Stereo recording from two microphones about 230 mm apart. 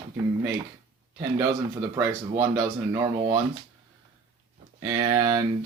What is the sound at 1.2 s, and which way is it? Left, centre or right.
Speech, centre.